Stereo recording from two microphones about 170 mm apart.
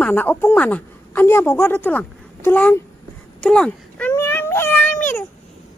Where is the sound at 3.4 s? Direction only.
5° left (ahead or behind).